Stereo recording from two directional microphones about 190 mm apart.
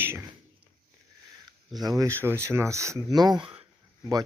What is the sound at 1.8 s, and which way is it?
Speech, 20° right (ahead or behind).